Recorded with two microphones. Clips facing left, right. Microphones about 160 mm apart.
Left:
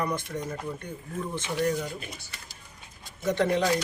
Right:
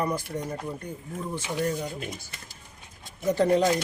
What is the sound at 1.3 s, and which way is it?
Speech, 15° right (ahead or behind).